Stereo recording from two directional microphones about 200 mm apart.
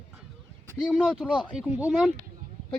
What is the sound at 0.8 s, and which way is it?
Speech, 5° right (ahead or behind).